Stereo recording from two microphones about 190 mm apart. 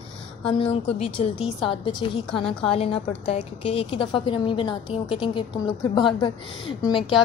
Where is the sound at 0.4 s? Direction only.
30° left (ahead or behind).